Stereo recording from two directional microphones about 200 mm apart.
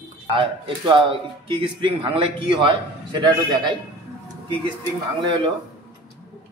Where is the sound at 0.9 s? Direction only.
25° right (ahead or behind).